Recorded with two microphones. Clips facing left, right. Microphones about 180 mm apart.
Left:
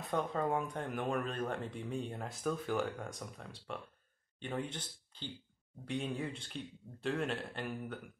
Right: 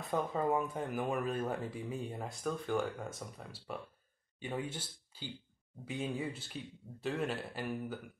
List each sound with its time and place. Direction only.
0.0 s speech: centre (ahead or behind)